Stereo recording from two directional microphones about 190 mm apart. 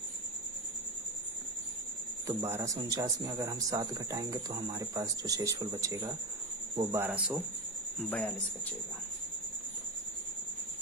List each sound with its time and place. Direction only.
2.2 s speech: 15° right (ahead or behind)
8.0 s speech: 5° left (ahead or behind)